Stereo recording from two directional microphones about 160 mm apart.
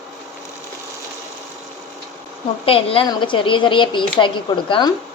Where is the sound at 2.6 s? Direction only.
35° left (ahead or behind).